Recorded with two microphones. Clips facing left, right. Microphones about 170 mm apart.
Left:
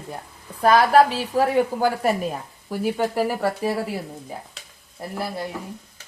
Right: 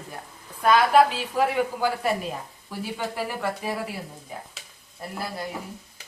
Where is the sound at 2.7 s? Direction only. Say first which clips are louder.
Left 8 dB; 45° left (ahead or behind).